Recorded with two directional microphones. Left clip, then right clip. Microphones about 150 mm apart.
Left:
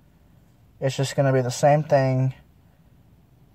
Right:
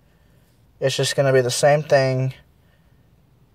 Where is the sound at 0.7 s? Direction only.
5° right (ahead or behind).